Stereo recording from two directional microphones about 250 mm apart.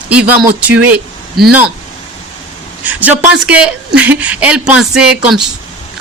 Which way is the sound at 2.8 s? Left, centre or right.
Centre.